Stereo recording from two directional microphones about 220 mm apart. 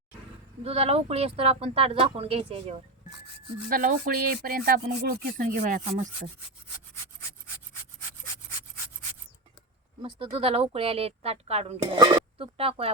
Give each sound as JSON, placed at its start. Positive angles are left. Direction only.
{"t": 0.6, "sound": "speech", "side_deg": -30}
{"t": 3.7, "sound": "speech", "side_deg": -40}
{"t": 10.0, "sound": "speech", "side_deg": -25}